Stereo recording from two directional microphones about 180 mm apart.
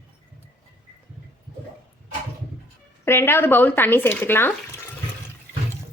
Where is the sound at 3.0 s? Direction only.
15° left (ahead or behind).